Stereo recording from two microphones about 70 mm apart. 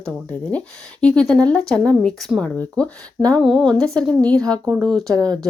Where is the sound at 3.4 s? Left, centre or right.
Centre.